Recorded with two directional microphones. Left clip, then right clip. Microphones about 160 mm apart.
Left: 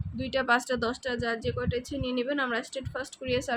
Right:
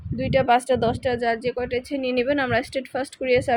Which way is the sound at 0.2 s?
15° right (ahead or behind).